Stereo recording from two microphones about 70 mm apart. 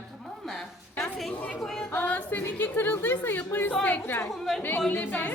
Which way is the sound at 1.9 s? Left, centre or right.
Left.